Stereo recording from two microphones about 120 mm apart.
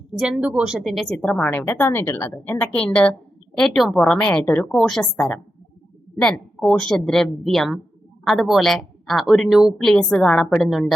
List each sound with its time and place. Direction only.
0.2 s a woman's voice: 5° right (ahead or behind)